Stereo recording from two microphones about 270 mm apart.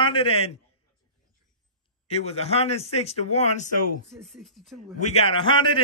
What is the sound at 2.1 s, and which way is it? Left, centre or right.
Speech, left.